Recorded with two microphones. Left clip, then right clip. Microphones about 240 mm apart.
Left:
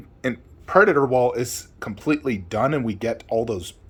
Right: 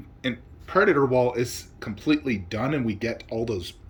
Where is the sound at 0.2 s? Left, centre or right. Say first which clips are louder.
Left 3 dB; centre.